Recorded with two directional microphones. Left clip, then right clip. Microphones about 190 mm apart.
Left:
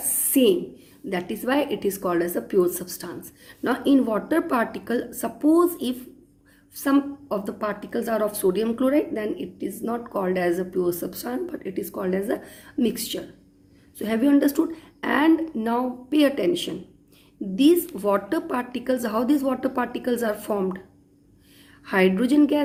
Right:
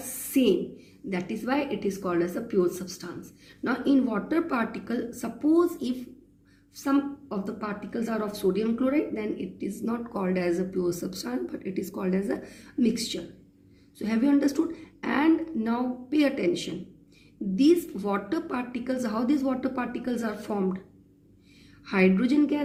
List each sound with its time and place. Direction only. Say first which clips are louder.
0.2 s writing: left 5 dB; 35° left (ahead or behind)
1.1 s a woman's voice: left 5 dB; 35° left (ahead or behind)
21.8 s a woman's voice: left 4 dB; 30° left (ahead or behind)